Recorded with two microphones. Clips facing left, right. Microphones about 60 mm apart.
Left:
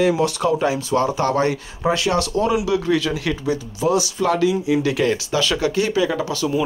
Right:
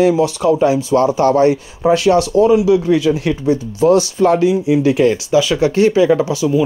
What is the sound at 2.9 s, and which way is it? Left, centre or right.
Speech, right.